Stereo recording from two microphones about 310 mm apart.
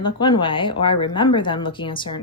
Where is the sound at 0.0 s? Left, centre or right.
Centre.